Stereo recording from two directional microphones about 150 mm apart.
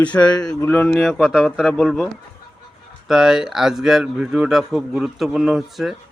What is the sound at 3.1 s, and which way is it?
Speech, 5° right (ahead or behind).